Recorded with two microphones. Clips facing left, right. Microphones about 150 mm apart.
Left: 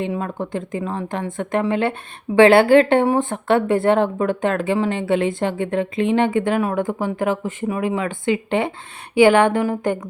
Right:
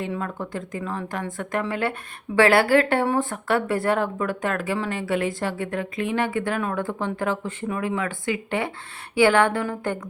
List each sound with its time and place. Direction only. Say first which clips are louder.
0.0 s a woman's voice: left 5 dB; 20° left (ahead or behind)